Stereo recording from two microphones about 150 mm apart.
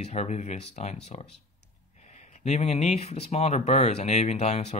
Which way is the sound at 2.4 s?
45° left (ahead or behind).